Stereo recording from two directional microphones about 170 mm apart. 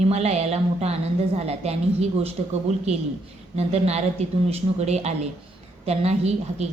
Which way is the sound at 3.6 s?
40° right (ahead or behind).